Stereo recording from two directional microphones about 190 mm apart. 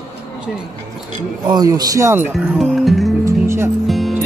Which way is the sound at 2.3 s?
Centre (ahead or behind).